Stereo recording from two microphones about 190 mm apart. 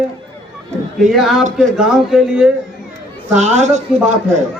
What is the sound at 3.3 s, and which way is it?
Speech, 35° right (ahead or behind).